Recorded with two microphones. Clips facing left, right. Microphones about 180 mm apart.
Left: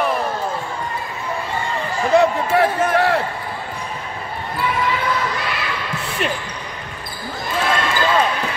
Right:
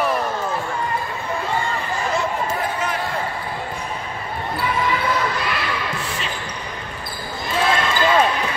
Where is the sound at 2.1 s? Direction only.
65° left (ahead or behind).